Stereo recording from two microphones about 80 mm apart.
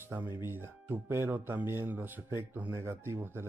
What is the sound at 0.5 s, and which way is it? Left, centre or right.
Speech, right.